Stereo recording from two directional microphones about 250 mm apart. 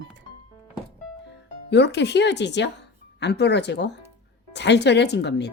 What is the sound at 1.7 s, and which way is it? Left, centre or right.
A woman's voice, left.